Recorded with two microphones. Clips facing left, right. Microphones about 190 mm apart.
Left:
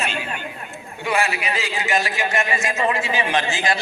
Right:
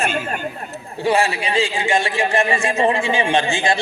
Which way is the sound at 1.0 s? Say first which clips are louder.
Right 4 dB; 30° right (ahead or behind).